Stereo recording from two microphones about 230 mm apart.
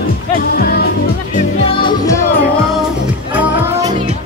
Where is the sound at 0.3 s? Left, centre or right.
Left.